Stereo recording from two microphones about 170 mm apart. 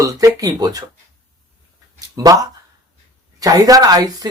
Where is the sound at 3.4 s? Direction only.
20° right (ahead or behind).